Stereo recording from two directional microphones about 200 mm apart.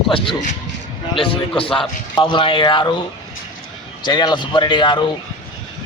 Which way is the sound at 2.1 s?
25° left (ahead or behind).